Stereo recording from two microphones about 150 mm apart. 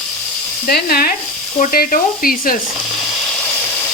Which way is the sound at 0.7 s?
85° left.